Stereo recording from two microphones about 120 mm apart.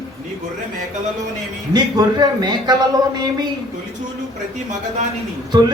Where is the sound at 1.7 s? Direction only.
35° right (ahead or behind).